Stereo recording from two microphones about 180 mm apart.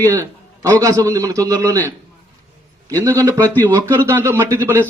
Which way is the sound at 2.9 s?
15° right (ahead or behind).